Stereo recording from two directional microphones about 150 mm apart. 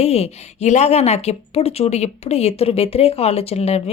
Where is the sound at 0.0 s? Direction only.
45° left (ahead or behind).